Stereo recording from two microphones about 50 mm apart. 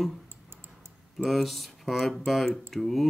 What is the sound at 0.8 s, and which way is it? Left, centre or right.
Speech, centre.